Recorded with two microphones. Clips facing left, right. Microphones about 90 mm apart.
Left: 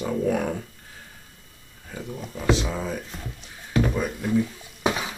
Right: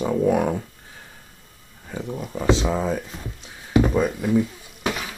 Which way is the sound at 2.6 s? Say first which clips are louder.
Right 6 dB; 30° right (ahead or behind).